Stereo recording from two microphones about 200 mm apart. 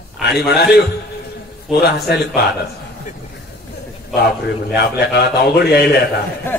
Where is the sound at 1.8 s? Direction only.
55° left (ahead or behind).